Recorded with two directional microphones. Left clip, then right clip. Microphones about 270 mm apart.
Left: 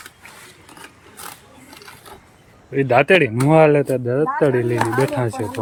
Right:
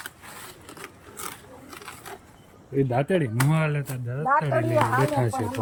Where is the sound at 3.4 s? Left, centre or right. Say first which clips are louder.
Left 15 dB; centre.